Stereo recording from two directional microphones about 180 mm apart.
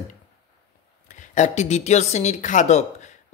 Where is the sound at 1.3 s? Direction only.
40° left (ahead or behind).